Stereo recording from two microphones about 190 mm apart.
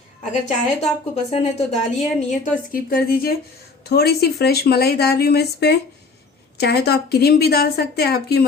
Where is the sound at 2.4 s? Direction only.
50° left (ahead or behind).